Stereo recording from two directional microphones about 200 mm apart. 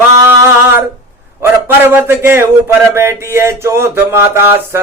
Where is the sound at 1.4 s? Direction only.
10° right (ahead or behind).